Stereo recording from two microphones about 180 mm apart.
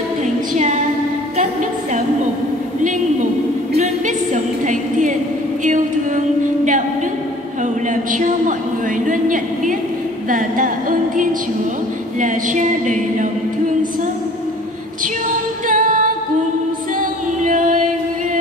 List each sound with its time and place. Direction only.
0.6 s female singing: 40° right (ahead or behind)
3.7 s a sound: 40° right (ahead or behind)
5.6 s female singing: 45° right (ahead or behind)
7.9 s a sound: 45° right (ahead or behind)
15.7 s female singing: 50° right (ahead or behind)
17.4 s singing: 45° right (ahead or behind)